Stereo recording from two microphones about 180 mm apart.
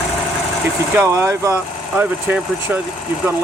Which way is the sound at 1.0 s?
15° right (ahead or behind).